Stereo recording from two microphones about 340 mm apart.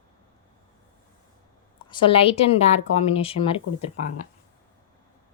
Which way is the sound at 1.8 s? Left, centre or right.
Centre.